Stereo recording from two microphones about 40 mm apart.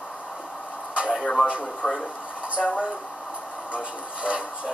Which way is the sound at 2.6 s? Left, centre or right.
Centre.